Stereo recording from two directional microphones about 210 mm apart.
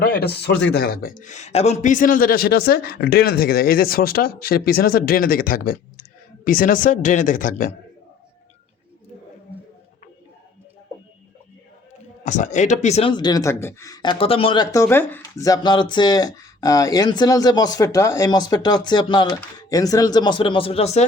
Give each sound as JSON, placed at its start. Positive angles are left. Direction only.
{"t": 0.0, "sound": "speech", "side_deg": 50}
{"t": 12.2, "sound": "speech", "side_deg": 35}